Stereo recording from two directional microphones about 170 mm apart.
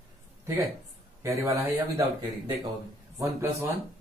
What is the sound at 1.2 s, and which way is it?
Speech, 15° right (ahead or behind).